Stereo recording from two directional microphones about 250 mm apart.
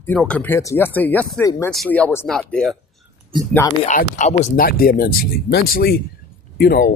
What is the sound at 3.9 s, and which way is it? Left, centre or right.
Speech, left.